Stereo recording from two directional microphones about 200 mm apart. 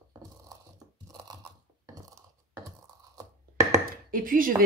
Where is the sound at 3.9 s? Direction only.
45° right (ahead or behind).